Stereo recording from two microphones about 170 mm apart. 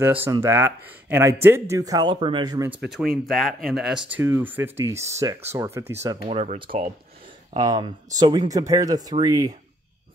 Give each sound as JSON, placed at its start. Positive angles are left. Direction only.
{"t": 0.0, "sound": "speech", "side_deg": -10}
{"t": 2.7, "sound": "speech", "side_deg": -5}
{"t": 6.2, "sound": "speech", "side_deg": -40}
{"t": 7.5, "sound": "speech", "side_deg": -25}